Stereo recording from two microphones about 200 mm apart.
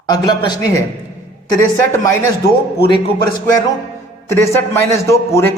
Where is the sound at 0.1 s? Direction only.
20° left (ahead or behind).